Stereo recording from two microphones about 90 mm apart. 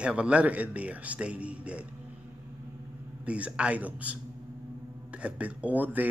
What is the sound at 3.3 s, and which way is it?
A man's voice, 15° right (ahead or behind).